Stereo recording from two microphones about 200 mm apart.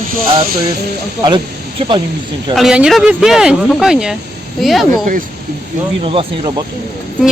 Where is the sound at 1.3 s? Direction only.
25° right (ahead or behind).